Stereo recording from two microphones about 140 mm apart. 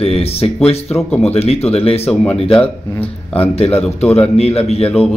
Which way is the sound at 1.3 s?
45° left (ahead or behind).